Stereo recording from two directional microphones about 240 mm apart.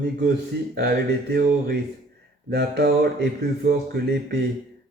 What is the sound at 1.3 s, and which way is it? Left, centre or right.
Speech, right.